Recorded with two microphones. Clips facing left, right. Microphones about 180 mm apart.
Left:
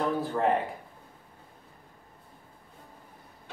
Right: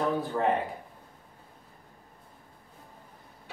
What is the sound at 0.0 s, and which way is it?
Speech, centre (ahead or behind).